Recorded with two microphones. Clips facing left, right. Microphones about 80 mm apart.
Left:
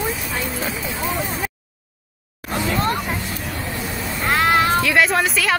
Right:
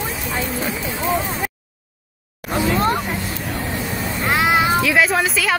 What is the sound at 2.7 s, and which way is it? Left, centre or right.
Speech, right.